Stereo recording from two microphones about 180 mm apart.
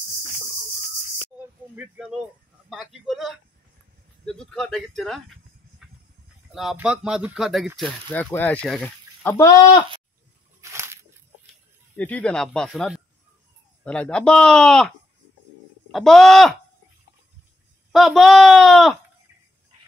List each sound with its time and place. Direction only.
1.8 s speech: 5° right (ahead or behind)
5.8 s a sound: centre (ahead or behind)
6.5 s speech: centre (ahead or behind)
8.1 s speech: 10° left (ahead or behind)
10.6 s a sound: 15° right (ahead or behind)
12.0 s speech: 10° left (ahead or behind)
15.9 s speech: centre (ahead or behind)
17.9 s speech: centre (ahead or behind)